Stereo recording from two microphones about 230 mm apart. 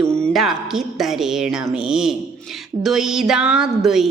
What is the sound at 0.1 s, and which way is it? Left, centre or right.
A woman's voice, centre.